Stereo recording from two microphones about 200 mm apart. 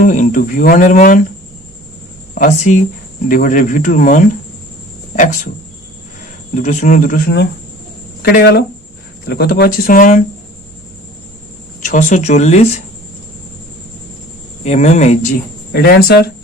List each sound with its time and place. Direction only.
0.0 s cricket: 40° left (ahead or behind)
2.3 s speech: 40° left (ahead or behind)
6.5 s speech: 40° left (ahead or behind)
8.2 s speech: 55° left (ahead or behind)
11.8 s speech: 40° left (ahead or behind)
14.6 s speech: 35° left (ahead or behind)
15.7 s speech: 50° left (ahead or behind)